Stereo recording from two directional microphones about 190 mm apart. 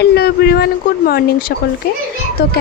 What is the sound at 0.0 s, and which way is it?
Speech, 55° left (ahead or behind).